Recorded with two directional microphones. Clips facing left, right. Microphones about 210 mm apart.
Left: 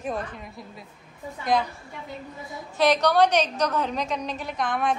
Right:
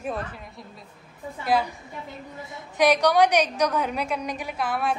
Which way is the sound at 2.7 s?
10° right (ahead or behind).